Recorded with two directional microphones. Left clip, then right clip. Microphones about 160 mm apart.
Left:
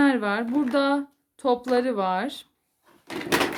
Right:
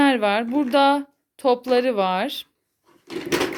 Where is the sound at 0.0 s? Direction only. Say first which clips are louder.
Right 4 dB; 15° right (ahead or behind).